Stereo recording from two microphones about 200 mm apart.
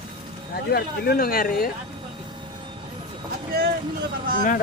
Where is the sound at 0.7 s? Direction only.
50° left (ahead or behind).